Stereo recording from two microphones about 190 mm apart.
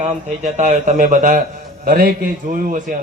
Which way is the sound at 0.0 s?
40° right (ahead or behind).